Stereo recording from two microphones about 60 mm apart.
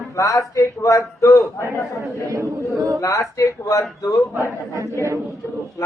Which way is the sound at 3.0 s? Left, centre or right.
Left.